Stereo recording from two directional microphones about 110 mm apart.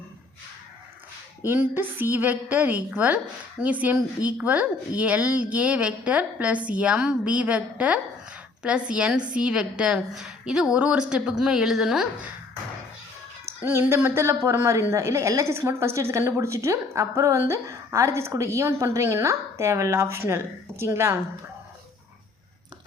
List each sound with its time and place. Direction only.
1.5 s a woman's voice: 15° right (ahead or behind)
13.4 s a woman's voice: 20° right (ahead or behind)